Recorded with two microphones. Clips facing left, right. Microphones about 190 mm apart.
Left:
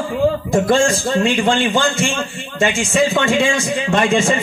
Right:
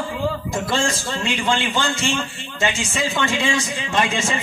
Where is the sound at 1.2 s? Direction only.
55° left (ahead or behind).